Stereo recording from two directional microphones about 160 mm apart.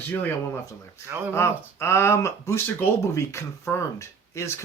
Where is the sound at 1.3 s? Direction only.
15° left (ahead or behind).